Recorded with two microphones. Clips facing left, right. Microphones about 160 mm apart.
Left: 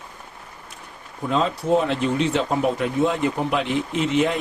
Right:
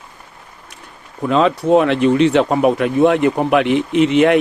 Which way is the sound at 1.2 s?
80° right.